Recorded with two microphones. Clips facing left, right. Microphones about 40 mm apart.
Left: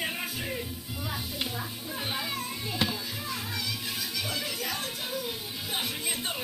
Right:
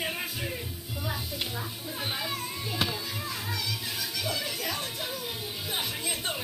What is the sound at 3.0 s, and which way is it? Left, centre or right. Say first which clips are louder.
Music: right 1 dB; right.